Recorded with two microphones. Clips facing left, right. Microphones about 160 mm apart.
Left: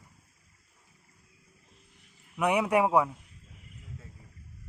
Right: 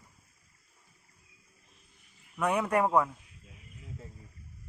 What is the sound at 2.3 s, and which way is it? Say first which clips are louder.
Speech: left 3 dB; 10° left (ahead or behind).